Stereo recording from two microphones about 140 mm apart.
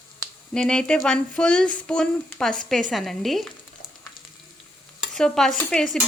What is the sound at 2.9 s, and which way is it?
Stir, centre (ahead or behind).